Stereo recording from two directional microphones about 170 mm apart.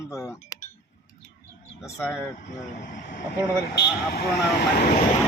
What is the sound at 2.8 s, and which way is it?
Speech, 50° left (ahead or behind).